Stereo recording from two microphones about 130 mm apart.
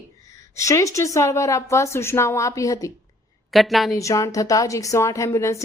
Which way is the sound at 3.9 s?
25° left (ahead or behind).